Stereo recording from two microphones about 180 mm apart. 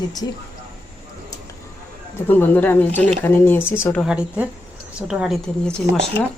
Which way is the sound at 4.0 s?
5° right (ahead or behind).